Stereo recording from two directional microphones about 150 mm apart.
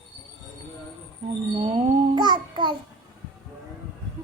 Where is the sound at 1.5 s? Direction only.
40° right (ahead or behind).